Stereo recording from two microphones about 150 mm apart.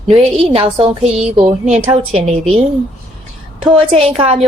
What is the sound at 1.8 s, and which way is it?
Speech, 40° right (ahead or behind).